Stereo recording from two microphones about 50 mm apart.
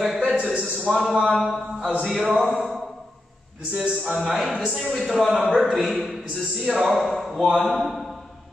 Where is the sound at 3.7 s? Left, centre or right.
Right.